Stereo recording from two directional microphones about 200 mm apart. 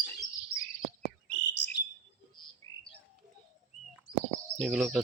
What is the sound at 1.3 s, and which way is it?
Bird, 60° left (ahead or behind).